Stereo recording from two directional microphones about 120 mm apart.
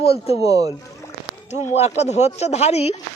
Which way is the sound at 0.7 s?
25° left (ahead or behind).